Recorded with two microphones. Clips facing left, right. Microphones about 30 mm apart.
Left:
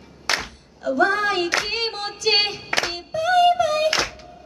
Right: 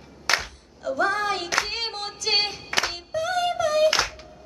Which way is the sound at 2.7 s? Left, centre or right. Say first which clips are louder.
Even; centre.